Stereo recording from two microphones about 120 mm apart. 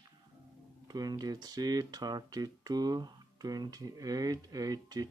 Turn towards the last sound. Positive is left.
turn(degrees=-30)  # may be behind; listen again after turning